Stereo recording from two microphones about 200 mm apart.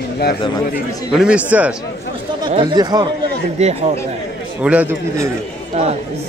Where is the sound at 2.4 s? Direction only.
25° right (ahead or behind).